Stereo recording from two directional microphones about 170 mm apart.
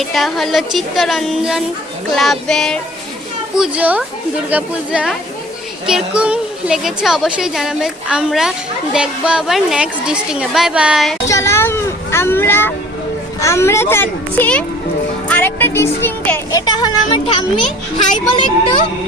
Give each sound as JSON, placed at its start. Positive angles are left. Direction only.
{"t": 0.0, "sound": "a woman's voice", "side_deg": 0}
{"t": 3.6, "sound": "a woman's voice", "side_deg": -10}
{"t": 11.3, "sound": "a sound", "side_deg": 15}
{"t": 13.4, "sound": "a child's voice", "side_deg": 15}
{"t": 16.6, "sound": "speech", "side_deg": 25}